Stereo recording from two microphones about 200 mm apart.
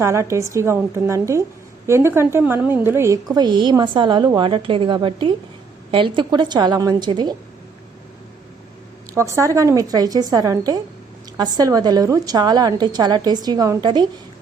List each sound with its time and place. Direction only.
0.0 s a woman's voice: 15° right (ahead or behind)
9.1 s a woman's voice: 15° right (ahead or behind)